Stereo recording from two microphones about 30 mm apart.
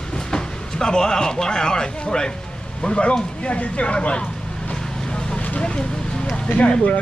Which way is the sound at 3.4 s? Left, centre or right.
Left.